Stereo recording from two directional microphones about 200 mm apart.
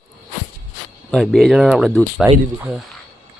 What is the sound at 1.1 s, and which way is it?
Speech, centre (ahead or behind).